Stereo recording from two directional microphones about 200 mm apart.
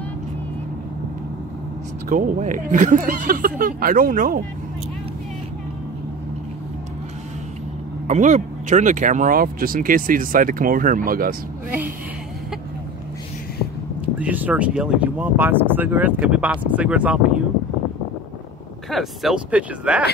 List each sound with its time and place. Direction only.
2.0 s speech: 40° right (ahead or behind)
8.1 s speech: 35° right (ahead or behind)
14.1 s speech: 10° right (ahead or behind)
18.9 s speech: centre (ahead or behind)